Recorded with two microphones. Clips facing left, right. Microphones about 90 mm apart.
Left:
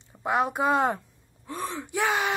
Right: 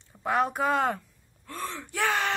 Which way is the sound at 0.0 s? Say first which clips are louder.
Left 1 dB; 15° left (ahead or behind).